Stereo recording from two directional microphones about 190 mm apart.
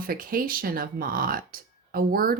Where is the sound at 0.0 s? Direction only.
50° right (ahead or behind).